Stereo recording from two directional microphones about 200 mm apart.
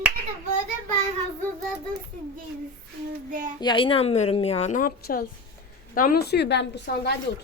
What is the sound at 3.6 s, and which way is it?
A woman's voice, 25° left (ahead or behind).